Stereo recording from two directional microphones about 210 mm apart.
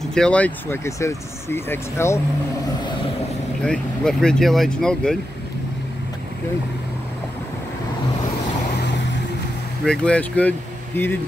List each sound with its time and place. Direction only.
0.1 s speech: 5° left (ahead or behind)
3.6 s speech: 5° left (ahead or behind)
8.7 s vehicle: 55° left (ahead or behind)
9.8 s speech: 5° left (ahead or behind)